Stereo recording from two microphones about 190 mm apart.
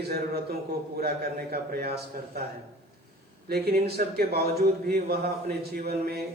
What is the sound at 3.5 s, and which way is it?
A man's voice, 55° right (ahead or behind).